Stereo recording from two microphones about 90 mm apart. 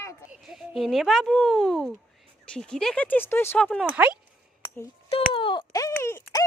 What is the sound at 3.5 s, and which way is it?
Speech, 10° left (ahead or behind).